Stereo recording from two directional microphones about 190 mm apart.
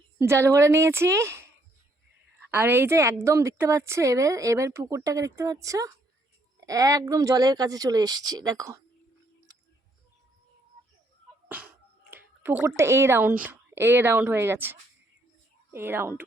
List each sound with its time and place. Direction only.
0.2 s a woman's voice: 15° right (ahead or behind)
2.5 s a woman's voice: 10° right (ahead or behind)
11.4 s a sound: 10° right (ahead or behind)
12.1 s a woman's voice: 10° right (ahead or behind)